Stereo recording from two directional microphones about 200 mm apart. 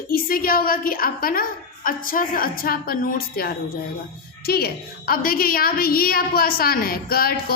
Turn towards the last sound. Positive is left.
turn(degrees=50)  # may be behind; listen again after turning